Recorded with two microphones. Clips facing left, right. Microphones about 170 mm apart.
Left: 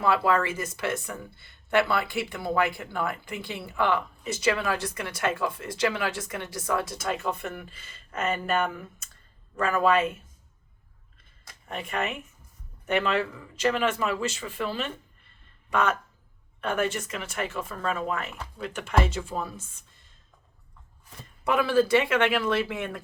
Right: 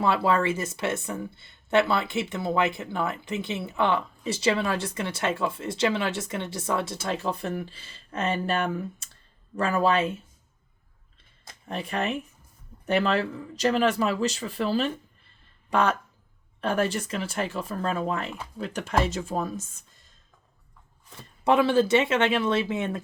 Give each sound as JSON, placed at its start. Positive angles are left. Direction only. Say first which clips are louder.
{"t": 0.0, "sound": "speech", "louder": "right 1 dB", "side_deg": -30}
{"t": 11.4, "sound": "speech", "louder": "right 3 dB", "side_deg": -35}
{"t": 21.4, "sound": "speech", "louder": "right 2 dB", "side_deg": -25}